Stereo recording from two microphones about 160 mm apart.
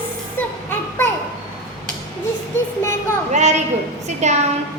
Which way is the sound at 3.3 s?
45° right (ahead or behind).